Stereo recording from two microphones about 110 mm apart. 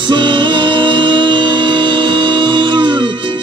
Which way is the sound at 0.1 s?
45° right (ahead or behind).